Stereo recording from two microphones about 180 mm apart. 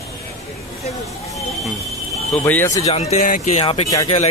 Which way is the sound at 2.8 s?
35° left (ahead or behind).